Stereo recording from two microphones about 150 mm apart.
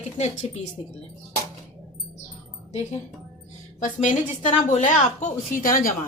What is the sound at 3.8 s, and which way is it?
Speech, 55° left (ahead or behind).